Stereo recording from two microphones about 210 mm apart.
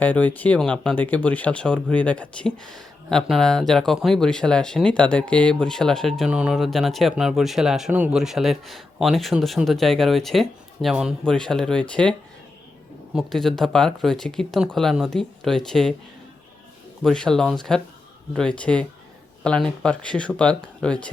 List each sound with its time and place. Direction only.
0.0 s speech: 10° left (ahead or behind)
13.1 s speech: centre (ahead or behind)
17.0 s speech: 5° left (ahead or behind)